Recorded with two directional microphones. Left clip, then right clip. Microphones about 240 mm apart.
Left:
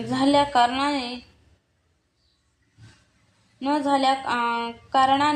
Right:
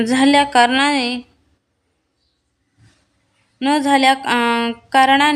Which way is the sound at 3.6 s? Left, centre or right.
Right.